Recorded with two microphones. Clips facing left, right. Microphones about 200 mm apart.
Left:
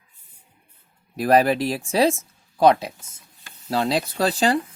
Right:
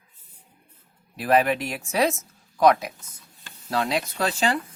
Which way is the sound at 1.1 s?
40° left (ahead or behind).